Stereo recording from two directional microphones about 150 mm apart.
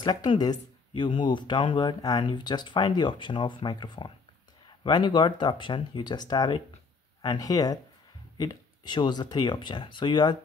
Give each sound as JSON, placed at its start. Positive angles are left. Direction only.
{"t": 0.0, "sound": "speech", "side_deg": 30}